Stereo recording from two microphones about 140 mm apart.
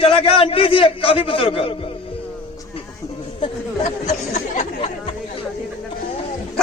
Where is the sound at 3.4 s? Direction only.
50° left (ahead or behind).